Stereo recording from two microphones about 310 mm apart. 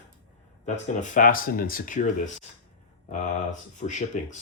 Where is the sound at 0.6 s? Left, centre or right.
Left.